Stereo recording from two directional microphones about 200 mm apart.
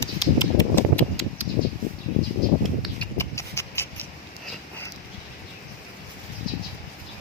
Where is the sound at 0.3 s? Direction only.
20° left (ahead or behind).